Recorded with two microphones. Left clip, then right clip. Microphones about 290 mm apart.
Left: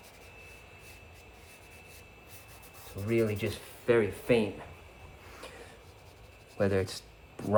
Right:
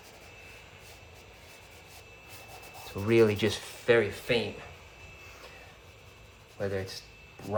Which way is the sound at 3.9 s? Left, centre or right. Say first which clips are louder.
Right 2 dB; centre.